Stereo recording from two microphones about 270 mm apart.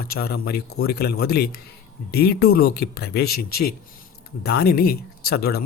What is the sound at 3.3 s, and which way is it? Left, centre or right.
Speech, left.